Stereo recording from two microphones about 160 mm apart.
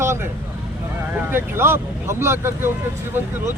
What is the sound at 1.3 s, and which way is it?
Speech, 15° right (ahead or behind).